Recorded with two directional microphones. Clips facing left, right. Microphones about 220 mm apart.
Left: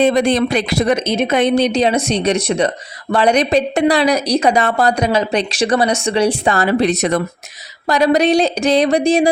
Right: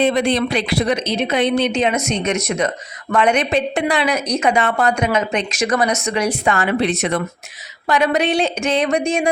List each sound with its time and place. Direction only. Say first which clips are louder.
0.0 s a woman's voice: left 3 dB; 45° left (ahead or behind)